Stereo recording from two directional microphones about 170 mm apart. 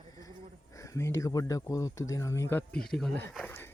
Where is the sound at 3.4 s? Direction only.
15° left (ahead or behind).